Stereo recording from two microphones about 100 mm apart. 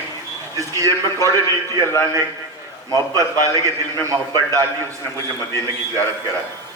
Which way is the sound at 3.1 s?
35° right (ahead or behind).